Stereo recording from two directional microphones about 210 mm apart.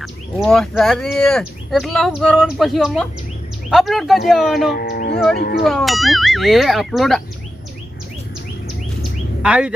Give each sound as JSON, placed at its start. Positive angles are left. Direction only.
{"t": 0.0, "sound": "speech", "side_deg": 0}
{"t": 4.7, "sound": "a sound", "side_deg": 50}
{"t": 5.4, "sound": "speech", "side_deg": 50}
{"t": 5.6, "sound": "speech", "side_deg": 0}
{"t": 9.4, "sound": "speech", "side_deg": -5}